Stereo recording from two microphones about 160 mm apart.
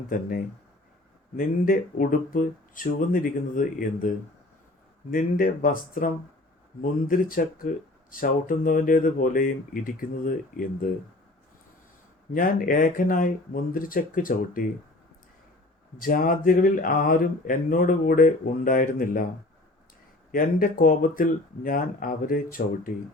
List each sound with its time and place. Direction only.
0.1 s speech: 60° left (ahead or behind)
5.1 s speech: 60° left (ahead or behind)
7.1 s speech: 60° left (ahead or behind)
12.3 s speech: 60° left (ahead or behind)
16.0 s speech: 60° left (ahead or behind)
20.3 s speech: 60° left (ahead or behind)